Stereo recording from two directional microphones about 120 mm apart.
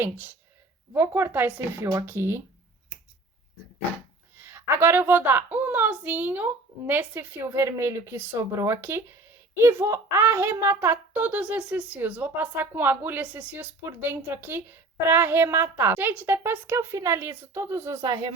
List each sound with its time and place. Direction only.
0.0 s a woman's voice: 15° right (ahead or behind)
4.4 s a woman's voice: 20° right (ahead or behind); by 18.3 s 35° right (ahead or behind)